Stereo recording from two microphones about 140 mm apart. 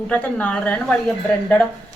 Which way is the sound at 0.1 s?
10° left (ahead or behind).